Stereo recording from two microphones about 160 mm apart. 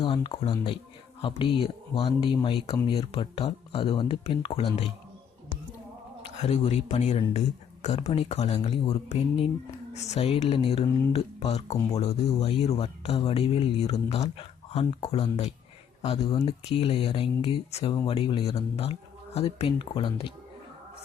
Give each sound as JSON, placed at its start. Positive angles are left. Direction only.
{"t": 0.0, "sound": "speech", "side_deg": 30}
{"t": 6.3, "sound": "speech", "side_deg": 40}